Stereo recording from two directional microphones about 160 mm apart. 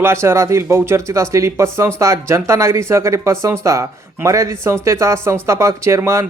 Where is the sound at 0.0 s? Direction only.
15° right (ahead or behind).